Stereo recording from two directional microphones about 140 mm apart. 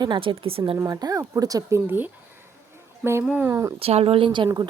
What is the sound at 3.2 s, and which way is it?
Speech, 10° right (ahead or behind).